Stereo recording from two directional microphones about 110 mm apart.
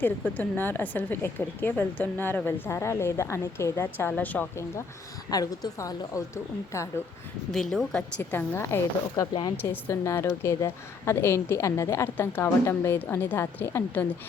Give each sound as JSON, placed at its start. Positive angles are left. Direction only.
{"t": 0.0, "sound": "a woman's voice", "side_deg": 15}
{"t": 5.3, "sound": "a woman's voice", "side_deg": 35}
{"t": 7.5, "sound": "a woman's voice", "side_deg": 5}
{"t": 8.2, "sound": "a woman's voice", "side_deg": 20}
{"t": 10.0, "sound": "a woman's voice", "side_deg": 25}